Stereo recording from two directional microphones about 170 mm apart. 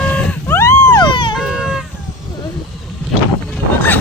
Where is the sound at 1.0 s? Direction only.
30° left (ahead or behind).